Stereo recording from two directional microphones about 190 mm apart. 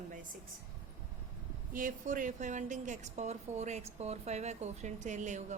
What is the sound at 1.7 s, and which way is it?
A woman's voice, 45° right (ahead or behind).